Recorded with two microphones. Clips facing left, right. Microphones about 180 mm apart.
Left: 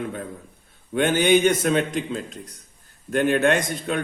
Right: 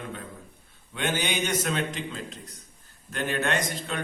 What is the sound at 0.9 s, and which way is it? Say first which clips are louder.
A man's voice: left 11 dB; 50° left (ahead or behind).